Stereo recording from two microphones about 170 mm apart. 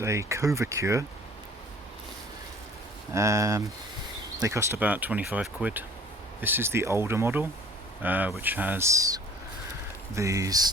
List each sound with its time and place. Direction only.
0.0 s speech: 15° right (ahead or behind)
3.1 s speech: 20° right (ahead or behind)